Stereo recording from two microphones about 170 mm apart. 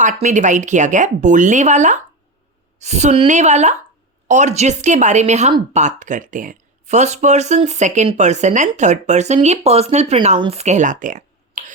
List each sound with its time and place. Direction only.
0.0 s speech: 45° right (ahead or behind)